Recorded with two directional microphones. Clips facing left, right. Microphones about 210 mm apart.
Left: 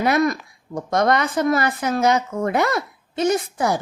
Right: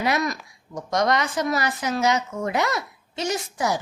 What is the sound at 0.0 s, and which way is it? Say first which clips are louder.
A woman's voice: left 6 dB; 50° left (ahead or behind).